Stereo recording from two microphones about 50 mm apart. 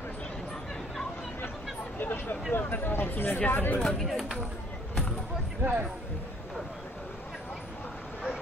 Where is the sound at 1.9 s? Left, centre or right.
Left.